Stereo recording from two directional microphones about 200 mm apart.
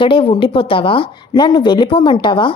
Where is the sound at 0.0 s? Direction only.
25° left (ahead or behind).